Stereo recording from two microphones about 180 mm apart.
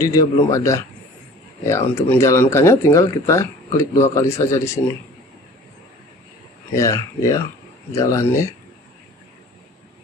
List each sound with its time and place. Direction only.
0.0 s speech: 20° left (ahead or behind)
6.7 s speech: 15° left (ahead or behind)